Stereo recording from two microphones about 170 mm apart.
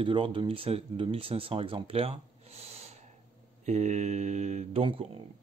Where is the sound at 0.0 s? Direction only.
30° right (ahead or behind).